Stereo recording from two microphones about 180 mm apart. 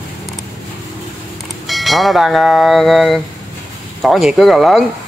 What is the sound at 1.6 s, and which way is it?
Speech, centre (ahead or behind).